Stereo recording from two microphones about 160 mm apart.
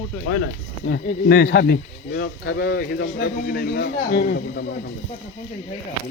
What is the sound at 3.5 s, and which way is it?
A man's voice, 80° left.